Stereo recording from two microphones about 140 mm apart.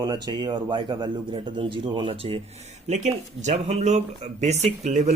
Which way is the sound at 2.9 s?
55° right (ahead or behind).